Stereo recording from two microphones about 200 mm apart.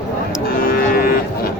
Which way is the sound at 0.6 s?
45° left (ahead or behind).